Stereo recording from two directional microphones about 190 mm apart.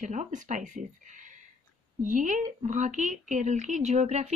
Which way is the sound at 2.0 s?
40° right (ahead or behind).